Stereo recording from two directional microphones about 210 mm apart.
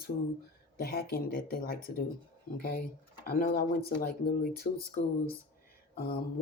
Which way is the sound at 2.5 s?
45° left (ahead or behind).